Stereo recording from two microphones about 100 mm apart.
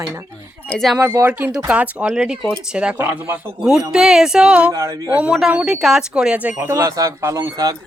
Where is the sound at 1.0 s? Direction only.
25° right (ahead or behind).